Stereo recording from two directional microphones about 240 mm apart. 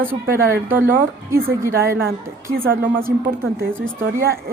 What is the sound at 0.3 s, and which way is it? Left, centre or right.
Speech, right.